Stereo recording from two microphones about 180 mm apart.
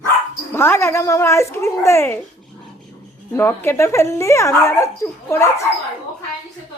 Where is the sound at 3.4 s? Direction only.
15° left (ahead or behind).